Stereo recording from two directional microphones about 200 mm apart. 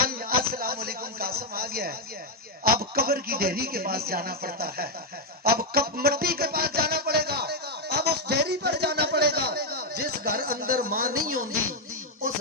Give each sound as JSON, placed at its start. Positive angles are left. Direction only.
{"t": 0.0, "sound": "a sound", "side_deg": -45}
{"t": 2.6, "sound": "a man's voice", "side_deg": -50}
{"t": 5.4, "sound": "music", "side_deg": -50}